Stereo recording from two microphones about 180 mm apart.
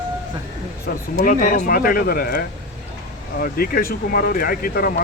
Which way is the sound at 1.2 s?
50° left (ahead or behind).